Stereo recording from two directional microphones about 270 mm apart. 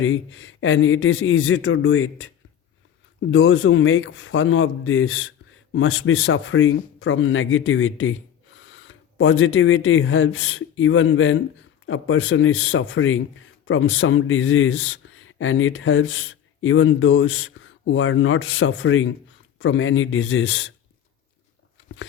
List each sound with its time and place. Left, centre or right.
0.0 s speech: left
3.3 s a man's voice: left